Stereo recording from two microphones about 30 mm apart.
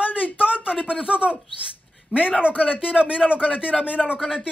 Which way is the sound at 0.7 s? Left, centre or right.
Right.